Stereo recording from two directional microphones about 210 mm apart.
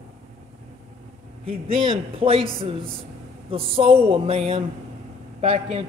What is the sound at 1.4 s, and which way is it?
A man's voice, 25° right (ahead or behind).